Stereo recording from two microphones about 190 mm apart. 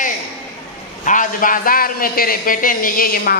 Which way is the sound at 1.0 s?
45° left (ahead or behind).